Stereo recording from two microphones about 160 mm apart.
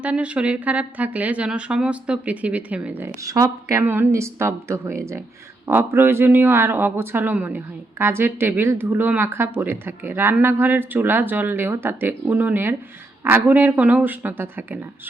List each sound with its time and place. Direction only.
0.0 s a woman's voice: 10° right (ahead or behind)
3.2 s a woman's voice: 20° right (ahead or behind)